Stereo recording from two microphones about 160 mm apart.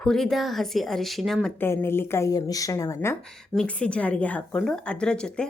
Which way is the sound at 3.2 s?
5° left (ahead or behind).